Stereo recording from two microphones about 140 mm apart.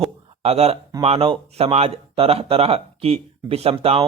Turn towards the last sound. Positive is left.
turn(degrees=-45)  # may be behind; listen again after turning